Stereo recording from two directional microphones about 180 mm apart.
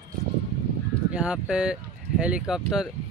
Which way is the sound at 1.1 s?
5° right (ahead or behind).